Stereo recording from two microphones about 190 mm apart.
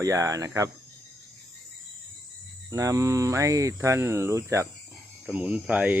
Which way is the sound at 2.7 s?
15° right (ahead or behind).